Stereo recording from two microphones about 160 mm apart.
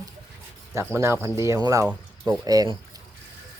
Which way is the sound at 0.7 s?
15° right (ahead or behind).